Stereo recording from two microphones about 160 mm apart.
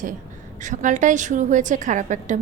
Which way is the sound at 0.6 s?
55° right (ahead or behind).